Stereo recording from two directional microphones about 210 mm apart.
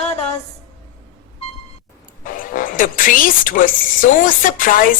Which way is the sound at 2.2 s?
40° left (ahead or behind).